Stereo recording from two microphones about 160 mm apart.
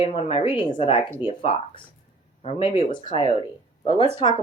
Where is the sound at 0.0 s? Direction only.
35° left (ahead or behind).